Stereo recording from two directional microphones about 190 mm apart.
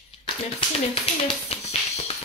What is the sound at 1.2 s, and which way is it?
Music, 30° left (ahead or behind).